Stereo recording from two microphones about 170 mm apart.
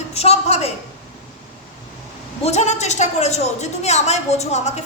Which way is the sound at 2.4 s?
40° left (ahead or behind).